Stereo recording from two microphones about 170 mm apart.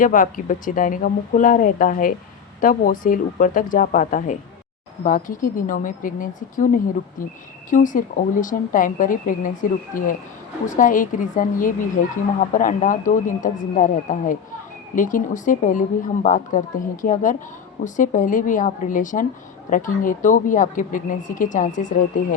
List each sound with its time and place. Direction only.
0.0 s speech: 50° left (ahead or behind)